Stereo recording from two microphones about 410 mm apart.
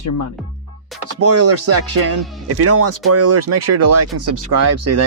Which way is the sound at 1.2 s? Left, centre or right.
Right.